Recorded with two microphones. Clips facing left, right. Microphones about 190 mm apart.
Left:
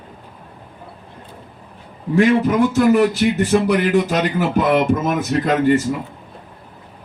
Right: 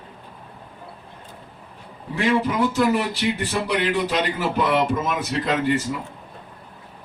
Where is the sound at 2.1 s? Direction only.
50° left (ahead or behind).